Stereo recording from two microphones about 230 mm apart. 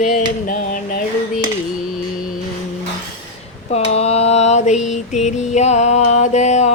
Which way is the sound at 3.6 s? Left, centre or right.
Left.